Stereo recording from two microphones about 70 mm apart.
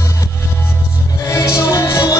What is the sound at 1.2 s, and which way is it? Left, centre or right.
Music, left.